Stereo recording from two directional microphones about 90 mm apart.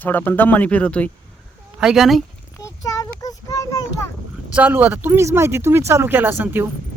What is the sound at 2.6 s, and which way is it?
Child singing, 40° left (ahead or behind).